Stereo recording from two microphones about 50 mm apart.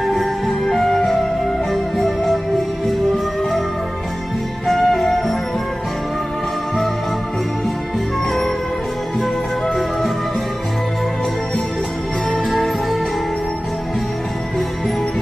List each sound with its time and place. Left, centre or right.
0.0 s music: centre
4.6 s music: centre
12.4 s music: centre